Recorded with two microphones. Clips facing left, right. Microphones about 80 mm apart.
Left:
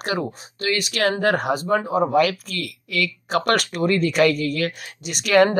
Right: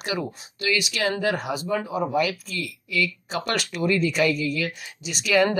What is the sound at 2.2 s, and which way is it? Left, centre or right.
Speech, left.